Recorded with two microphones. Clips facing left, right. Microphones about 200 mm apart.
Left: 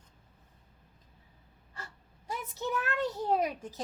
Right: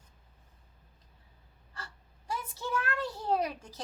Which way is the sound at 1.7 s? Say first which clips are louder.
Even; 20° left (ahead or behind).